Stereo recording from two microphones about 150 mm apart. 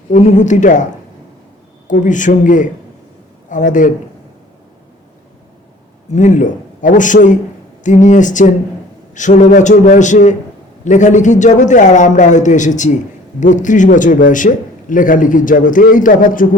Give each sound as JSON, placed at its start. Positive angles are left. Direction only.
{"t": 0.1, "sound": "a woman's voice", "side_deg": 55}
{"t": 1.9, "sound": "a man's voice", "side_deg": 55}
{"t": 6.1, "sound": "a man's voice", "side_deg": 55}